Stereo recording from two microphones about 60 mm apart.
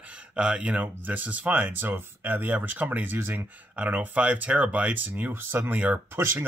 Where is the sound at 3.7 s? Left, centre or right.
Right.